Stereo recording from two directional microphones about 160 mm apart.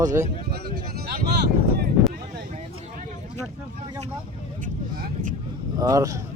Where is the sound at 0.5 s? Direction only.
80° right.